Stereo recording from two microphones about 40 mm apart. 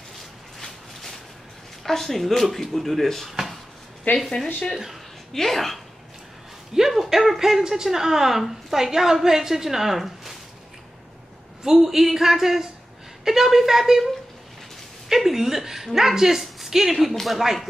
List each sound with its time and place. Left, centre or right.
1.9 s speech: centre
4.1 s speech: left
5.3 s speech: centre
6.7 s speech: centre
11.6 s speech: centre
15.0 s a woman's voice: centre